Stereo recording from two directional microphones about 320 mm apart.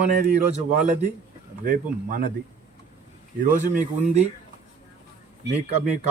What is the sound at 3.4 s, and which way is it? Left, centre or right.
Speech, right.